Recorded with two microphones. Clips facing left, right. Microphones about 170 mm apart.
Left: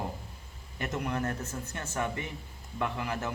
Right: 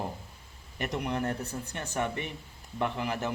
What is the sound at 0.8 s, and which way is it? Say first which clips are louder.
Speech: right 1 dB; 15° right (ahead or behind).